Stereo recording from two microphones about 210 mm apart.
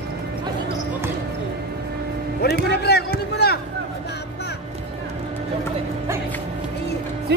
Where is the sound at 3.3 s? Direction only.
50° left (ahead or behind).